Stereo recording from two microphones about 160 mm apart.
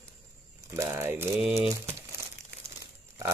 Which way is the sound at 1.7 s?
20° right (ahead or behind).